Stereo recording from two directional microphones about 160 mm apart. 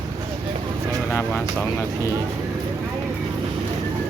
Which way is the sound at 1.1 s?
15° left (ahead or behind).